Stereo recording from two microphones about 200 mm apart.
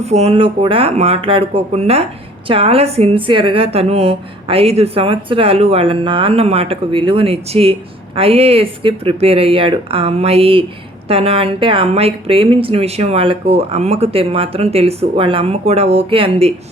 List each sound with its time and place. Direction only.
0.0 s a woman's voice: 30° right (ahead or behind)